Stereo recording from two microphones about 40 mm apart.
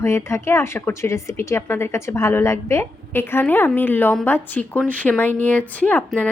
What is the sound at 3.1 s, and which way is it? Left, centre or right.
Speech, left.